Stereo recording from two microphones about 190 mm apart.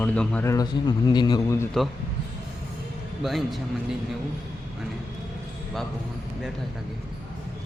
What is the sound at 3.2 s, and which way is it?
Speech, centre (ahead or behind).